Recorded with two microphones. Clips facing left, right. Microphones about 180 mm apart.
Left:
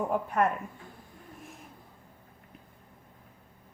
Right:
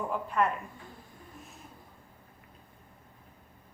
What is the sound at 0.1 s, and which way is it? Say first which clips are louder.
Speech: right 1 dB; 50° left (ahead or behind).